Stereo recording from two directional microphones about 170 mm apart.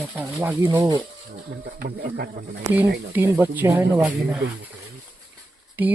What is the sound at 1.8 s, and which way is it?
Speech, 65° right (ahead or behind).